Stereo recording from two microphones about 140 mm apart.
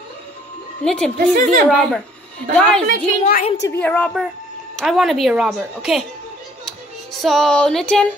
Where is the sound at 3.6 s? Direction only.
15° left (ahead or behind).